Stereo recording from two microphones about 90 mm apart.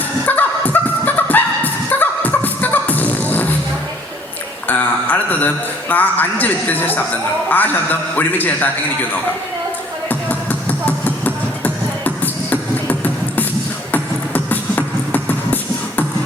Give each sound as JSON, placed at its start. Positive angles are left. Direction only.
{"t": 0.3, "sound": "music", "side_deg": 20}
{"t": 4.7, "sound": "speech", "side_deg": 20}
{"t": 10.1, "sound": "music", "side_deg": 20}